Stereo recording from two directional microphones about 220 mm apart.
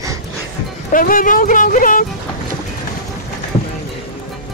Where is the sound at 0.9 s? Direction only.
40° left (ahead or behind).